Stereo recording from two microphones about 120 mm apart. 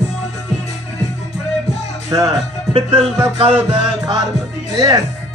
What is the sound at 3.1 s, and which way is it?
Music, 50° right (ahead or behind).